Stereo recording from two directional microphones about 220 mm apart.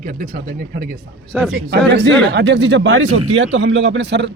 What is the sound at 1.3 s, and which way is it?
Speech, 5° right (ahead or behind).